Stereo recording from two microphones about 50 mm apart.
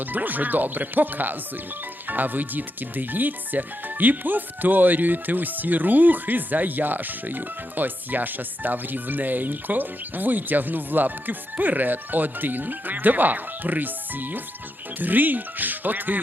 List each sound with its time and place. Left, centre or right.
0.0 s speech: right